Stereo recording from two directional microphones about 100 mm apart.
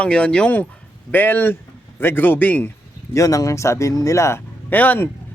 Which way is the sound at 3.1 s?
35° left (ahead or behind).